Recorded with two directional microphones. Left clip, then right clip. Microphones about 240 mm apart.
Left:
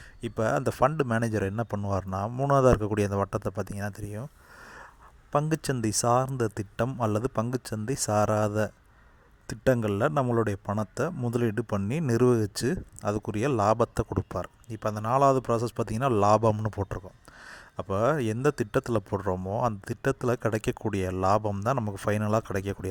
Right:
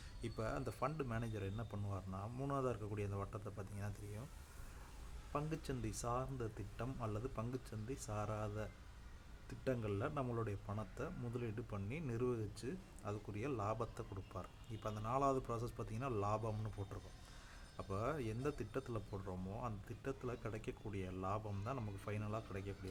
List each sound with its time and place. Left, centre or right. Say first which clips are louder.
0.2 s a man's voice: left 18 dB; left
5.3 s a man's voice: left 17 dB; left